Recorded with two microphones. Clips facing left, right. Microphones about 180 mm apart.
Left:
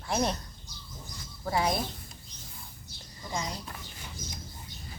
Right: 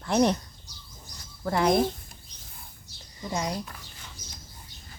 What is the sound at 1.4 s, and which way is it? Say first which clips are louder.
Speech: right 6 dB; 55° right (ahead or behind).